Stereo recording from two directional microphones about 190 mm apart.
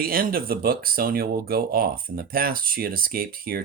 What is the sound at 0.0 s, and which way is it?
Speech, 50° right (ahead or behind).